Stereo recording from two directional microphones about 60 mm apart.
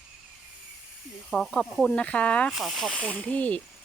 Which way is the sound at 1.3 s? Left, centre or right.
Centre.